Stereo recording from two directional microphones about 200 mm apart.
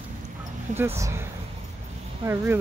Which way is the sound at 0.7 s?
15° right (ahead or behind).